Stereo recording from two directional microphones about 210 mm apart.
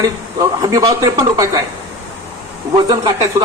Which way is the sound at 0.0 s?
15° right (ahead or behind).